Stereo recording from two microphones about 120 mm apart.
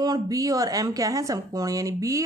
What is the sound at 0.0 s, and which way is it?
A woman's voice, 30° right (ahead or behind).